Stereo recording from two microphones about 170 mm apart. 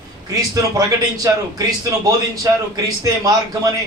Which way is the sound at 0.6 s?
20° right (ahead or behind).